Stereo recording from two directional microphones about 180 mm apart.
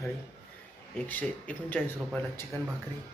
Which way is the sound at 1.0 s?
10° left (ahead or behind).